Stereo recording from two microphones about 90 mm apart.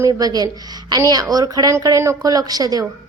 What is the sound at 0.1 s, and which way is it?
Speech, 45° right (ahead or behind).